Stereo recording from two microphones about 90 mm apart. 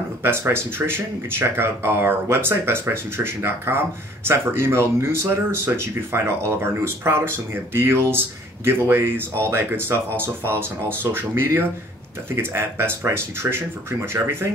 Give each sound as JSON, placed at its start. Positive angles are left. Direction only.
{"t": 0.2, "sound": "speech", "side_deg": -25}